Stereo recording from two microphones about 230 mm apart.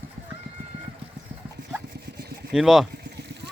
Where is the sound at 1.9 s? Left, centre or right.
Right.